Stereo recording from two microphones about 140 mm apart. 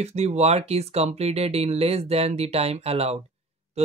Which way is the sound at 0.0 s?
50° right (ahead or behind).